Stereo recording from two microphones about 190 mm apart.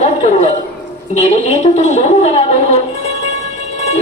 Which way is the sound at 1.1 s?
35° left (ahead or behind).